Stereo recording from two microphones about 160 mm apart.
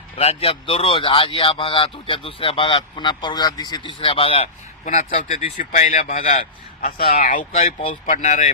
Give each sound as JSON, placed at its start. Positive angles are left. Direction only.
{"t": 0.2, "sound": "speech", "side_deg": 40}
{"t": 4.9, "sound": "speech", "side_deg": 50}